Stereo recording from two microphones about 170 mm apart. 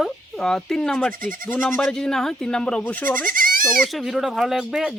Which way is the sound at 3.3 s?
55° right (ahead or behind).